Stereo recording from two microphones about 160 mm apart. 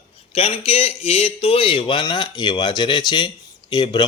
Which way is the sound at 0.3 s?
35° left (ahead or behind).